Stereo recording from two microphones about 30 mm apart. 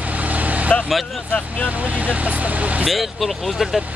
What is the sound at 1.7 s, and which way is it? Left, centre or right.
Speech, right.